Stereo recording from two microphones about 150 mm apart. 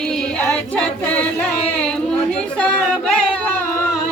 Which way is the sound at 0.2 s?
5° left (ahead or behind).